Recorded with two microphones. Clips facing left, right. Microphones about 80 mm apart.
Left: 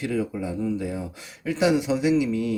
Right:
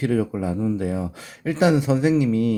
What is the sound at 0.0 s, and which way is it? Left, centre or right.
Speech, right.